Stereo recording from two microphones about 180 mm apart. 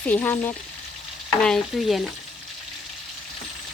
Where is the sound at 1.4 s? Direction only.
5° left (ahead or behind).